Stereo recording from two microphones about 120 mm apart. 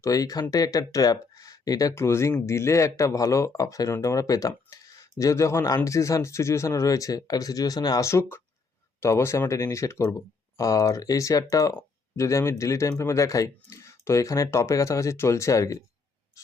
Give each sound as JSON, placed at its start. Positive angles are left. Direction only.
{"t": 0.0, "sound": "speech", "side_deg": 30}